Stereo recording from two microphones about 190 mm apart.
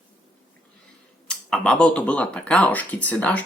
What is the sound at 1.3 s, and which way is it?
Speech, 5° left (ahead or behind).